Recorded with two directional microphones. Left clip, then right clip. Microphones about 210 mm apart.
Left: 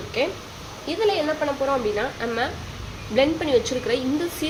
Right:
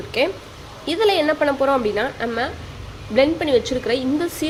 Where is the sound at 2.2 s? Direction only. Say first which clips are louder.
Right 2 dB; 15° right (ahead or behind).